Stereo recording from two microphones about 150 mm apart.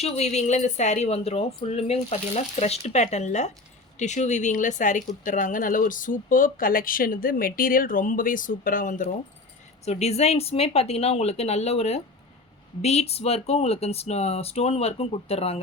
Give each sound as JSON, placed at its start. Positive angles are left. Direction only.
{"t": 0.0, "sound": "a woman's voice", "side_deg": 45}
{"t": 9.8, "sound": "a woman's voice", "side_deg": 45}